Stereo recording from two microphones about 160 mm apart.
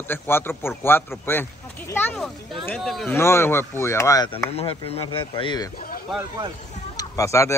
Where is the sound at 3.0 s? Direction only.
15° left (ahead or behind).